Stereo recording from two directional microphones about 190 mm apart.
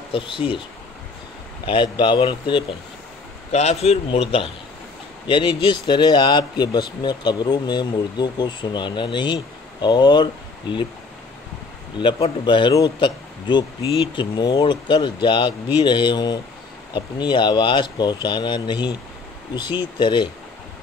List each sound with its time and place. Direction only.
0.1 s speech: 25° left (ahead or behind)
1.7 s a man's voice: 25° left (ahead or behind)
5.2 s speech: 25° left (ahead or behind)
12.0 s speech: 25° left (ahead or behind)